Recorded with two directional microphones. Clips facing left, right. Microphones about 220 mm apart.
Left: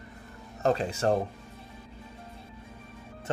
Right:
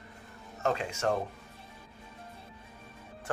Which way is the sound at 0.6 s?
35° left (ahead or behind).